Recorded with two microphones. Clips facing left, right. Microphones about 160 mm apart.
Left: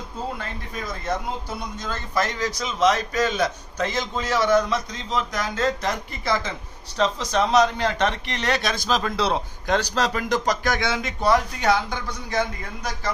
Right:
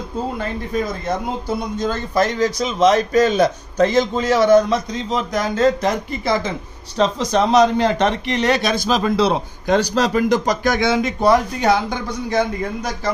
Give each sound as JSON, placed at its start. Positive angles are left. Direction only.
{"t": 2.1, "sound": "a man's voice", "side_deg": -25}
{"t": 3.1, "sound": "a man's voice", "side_deg": -40}
{"t": 10.6, "sound": "a man's voice", "side_deg": -20}